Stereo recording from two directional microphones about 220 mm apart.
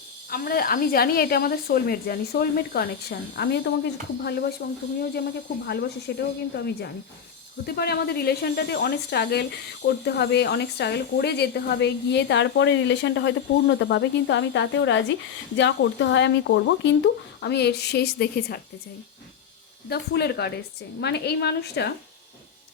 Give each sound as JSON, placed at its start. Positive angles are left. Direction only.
{"t": 0.3, "sound": "speech", "side_deg": 40}
{"t": 5.6, "sound": "speech", "side_deg": 45}
{"t": 19.9, "sound": "speech", "side_deg": 45}